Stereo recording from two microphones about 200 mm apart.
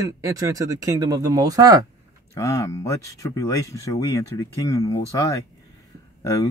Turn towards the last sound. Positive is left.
turn(degrees=15)  # may be behind; listen again after turning